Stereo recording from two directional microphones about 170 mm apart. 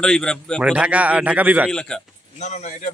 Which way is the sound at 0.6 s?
5° right (ahead or behind).